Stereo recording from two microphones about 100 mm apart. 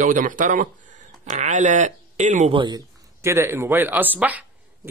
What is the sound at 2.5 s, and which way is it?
Speech, 55° right (ahead or behind).